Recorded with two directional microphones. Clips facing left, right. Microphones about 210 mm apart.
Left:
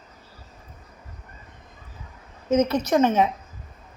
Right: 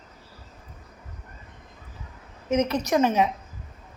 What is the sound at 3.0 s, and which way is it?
Speech, 10° right (ahead or behind).